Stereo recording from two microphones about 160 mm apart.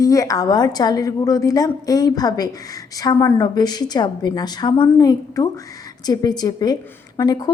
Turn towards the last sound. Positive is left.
turn(degrees=25)  # may be behind; listen again after turning